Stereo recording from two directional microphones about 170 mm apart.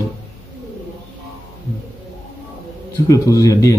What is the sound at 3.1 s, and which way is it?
Speech, 20° left (ahead or behind).